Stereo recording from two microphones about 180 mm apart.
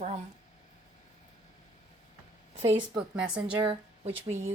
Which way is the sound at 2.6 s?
30° right (ahead or behind).